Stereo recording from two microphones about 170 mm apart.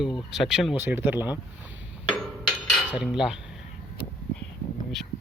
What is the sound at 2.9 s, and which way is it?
Speech, 5° right (ahead or behind).